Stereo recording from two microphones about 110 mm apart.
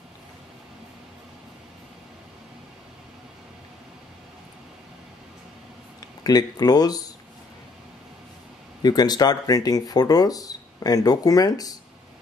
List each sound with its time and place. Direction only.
6.2 s speech: 35° left (ahead or behind)
8.8 s speech: 40° left (ahead or behind)